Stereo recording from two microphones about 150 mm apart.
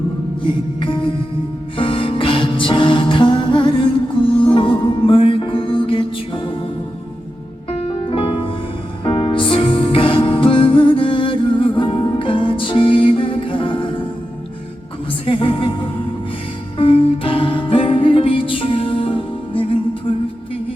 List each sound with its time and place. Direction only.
0.4 s music: 35° left (ahead or behind)
7.7 s music: 40° left (ahead or behind)
15.3 s music: 35° left (ahead or behind)
16.7 s music: 35° left (ahead or behind)